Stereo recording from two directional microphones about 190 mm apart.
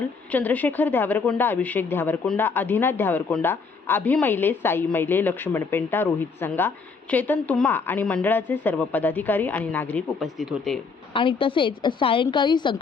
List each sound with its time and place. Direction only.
0.3 s a woman's voice: 10° left (ahead or behind)
11.1 s a woman's voice: 25° left (ahead or behind)